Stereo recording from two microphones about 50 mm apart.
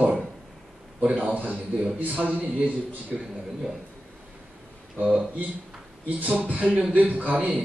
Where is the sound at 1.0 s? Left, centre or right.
Right.